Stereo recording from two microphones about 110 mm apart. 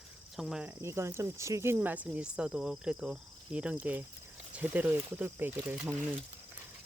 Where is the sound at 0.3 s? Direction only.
5° right (ahead or behind).